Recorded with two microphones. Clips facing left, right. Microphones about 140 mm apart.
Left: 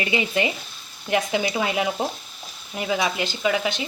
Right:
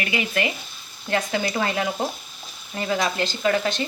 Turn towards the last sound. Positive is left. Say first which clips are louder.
# right 1 dB
turn(degrees=10)  # may be behind; listen again after turning